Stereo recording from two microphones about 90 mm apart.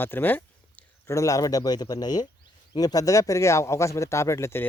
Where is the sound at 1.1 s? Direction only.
35° left (ahead or behind).